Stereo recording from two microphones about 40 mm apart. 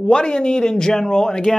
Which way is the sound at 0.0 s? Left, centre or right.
Left.